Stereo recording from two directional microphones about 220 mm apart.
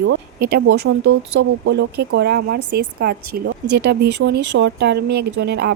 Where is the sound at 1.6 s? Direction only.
50° right (ahead or behind).